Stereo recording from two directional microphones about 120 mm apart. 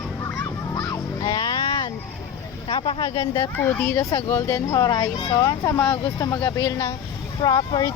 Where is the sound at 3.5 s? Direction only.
15° left (ahead or behind).